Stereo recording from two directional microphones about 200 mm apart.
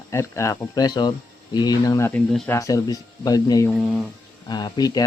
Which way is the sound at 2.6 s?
15° left (ahead or behind).